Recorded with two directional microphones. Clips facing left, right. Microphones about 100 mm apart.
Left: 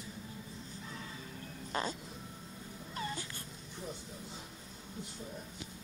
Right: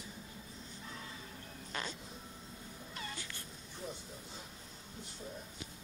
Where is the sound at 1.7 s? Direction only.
35° left (ahead or behind).